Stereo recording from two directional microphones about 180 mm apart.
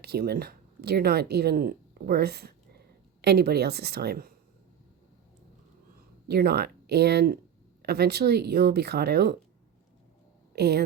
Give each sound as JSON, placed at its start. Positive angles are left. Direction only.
{"t": 0.0, "sound": "speech", "side_deg": -60}
{"t": 6.2, "sound": "speech", "side_deg": -60}
{"t": 10.5, "sound": "speech", "side_deg": -65}